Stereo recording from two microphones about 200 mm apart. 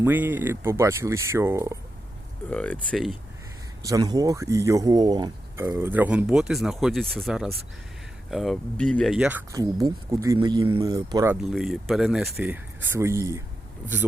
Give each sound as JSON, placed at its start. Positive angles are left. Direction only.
{"t": 0.0, "sound": "speech", "side_deg": -10}
{"t": 2.5, "sound": "speech", "side_deg": 5}
{"t": 3.8, "sound": "speech", "side_deg": -15}
{"t": 9.5, "sound": "speech", "side_deg": -15}
{"t": 11.5, "sound": "speech", "side_deg": 0}